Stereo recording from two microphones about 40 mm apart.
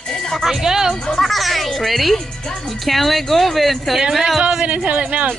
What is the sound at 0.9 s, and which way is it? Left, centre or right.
Music, centre.